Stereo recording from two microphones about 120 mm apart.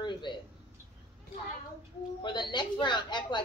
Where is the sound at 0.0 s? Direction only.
40° left (ahead or behind).